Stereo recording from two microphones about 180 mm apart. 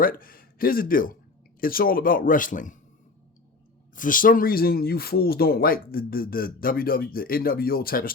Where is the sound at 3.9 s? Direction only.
50° left (ahead or behind).